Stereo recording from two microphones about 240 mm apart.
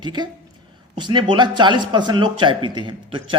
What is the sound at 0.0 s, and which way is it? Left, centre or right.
A man's voice, centre.